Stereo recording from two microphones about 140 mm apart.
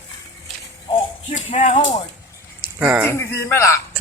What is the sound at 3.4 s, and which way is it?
Speech, 20° left (ahead or behind).